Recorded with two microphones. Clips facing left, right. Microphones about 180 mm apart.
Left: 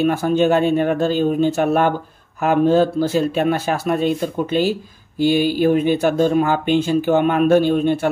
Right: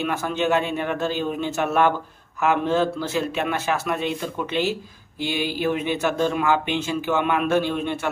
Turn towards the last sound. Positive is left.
turn(degrees=50)  # may be behind; listen again after turning